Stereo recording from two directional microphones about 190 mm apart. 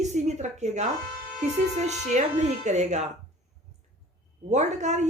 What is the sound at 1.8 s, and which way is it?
A woman's voice, 35° right (ahead or behind).